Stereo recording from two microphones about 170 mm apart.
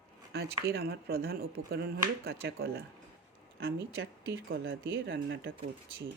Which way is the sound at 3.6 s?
80° right.